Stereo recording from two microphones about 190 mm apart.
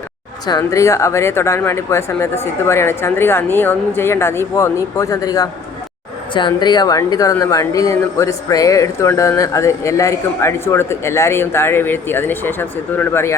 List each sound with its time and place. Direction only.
0.4 s a woman's voice: 20° left (ahead or behind)